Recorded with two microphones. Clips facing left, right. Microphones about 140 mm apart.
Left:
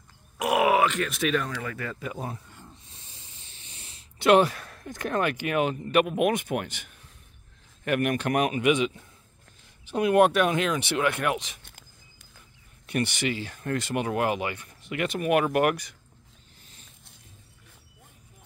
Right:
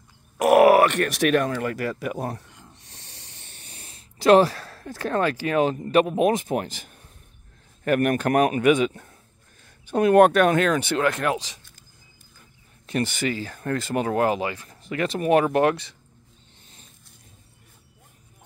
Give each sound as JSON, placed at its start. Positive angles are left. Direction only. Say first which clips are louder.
{"t": 0.4, "sound": "speech", "louder": "right 7 dB", "side_deg": -60}
{"t": 2.8, "sound": "hiss", "louder": "right 3 dB", "side_deg": -75}
{"t": 3.6, "sound": "speech", "louder": "right 3 dB", "side_deg": -40}
{"t": 12.9, "sound": "speech", "louder": "right 2 dB", "side_deg": -40}